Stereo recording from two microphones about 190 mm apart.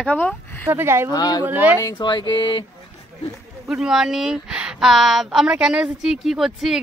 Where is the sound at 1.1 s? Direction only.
20° left (ahead or behind).